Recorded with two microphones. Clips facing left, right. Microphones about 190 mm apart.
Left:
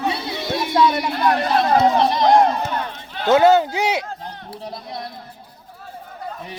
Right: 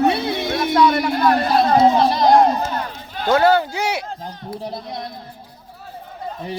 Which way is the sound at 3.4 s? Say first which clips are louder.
Left 1 dB; 20° left (ahead or behind).